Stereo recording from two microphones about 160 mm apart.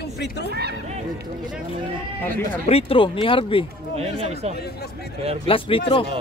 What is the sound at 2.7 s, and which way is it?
Speech, 35° left (ahead or behind).